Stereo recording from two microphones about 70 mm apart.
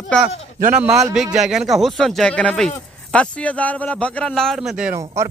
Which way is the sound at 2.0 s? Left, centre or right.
Centre.